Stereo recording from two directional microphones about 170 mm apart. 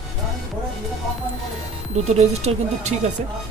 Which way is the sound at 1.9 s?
40° right (ahead or behind).